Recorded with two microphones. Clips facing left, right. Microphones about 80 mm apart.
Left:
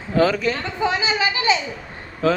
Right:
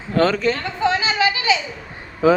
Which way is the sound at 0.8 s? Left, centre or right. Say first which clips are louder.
Right 2 dB; centre.